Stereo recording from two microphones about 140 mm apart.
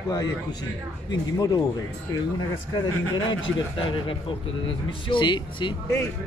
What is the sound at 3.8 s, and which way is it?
Speech, 40° left (ahead or behind).